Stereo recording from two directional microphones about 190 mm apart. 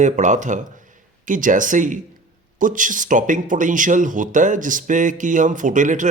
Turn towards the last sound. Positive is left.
turn(degrees=-40)  # may be behind; listen again after turning